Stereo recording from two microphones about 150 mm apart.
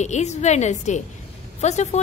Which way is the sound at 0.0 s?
50° left (ahead or behind).